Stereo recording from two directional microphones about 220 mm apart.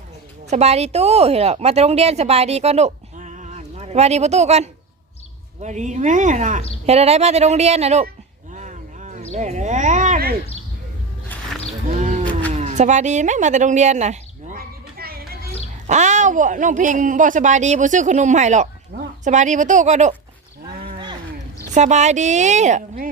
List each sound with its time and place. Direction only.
0.5 s speech: 30° right (ahead or behind)
8.5 s a sound: 30° right (ahead or behind)
9.3 s speech: 30° right (ahead or behind)
11.9 s a sound: 35° right (ahead or behind)
15.9 s speech: 30° right (ahead or behind)
21.7 s speech: 30° right (ahead or behind)